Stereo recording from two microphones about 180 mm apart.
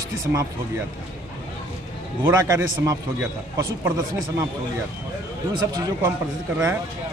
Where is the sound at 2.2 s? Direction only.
20° right (ahead or behind).